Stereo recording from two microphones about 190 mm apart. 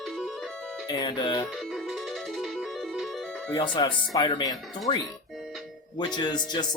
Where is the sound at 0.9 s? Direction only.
20° left (ahead or behind).